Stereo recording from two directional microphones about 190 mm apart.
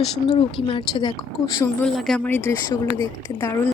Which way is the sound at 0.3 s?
25° left (ahead or behind).